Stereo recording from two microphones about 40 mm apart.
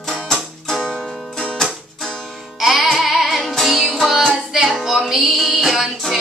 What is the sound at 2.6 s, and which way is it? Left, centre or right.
Music, centre.